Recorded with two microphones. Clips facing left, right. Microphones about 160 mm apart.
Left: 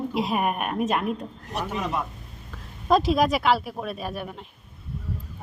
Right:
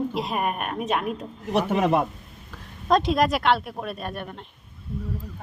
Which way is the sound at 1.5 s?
60° right (ahead or behind).